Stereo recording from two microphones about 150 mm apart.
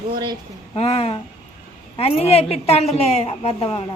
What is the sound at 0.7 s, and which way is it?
A woman's voice, 40° left (ahead or behind).